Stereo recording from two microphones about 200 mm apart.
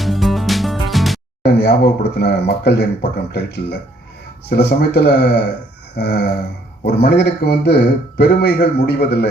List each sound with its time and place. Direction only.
0.0 s music: centre (ahead or behind)
1.6 s a man's voice: 55° left (ahead or behind)